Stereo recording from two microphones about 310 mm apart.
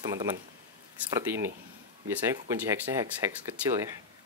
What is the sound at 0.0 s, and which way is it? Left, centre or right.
Speech, centre.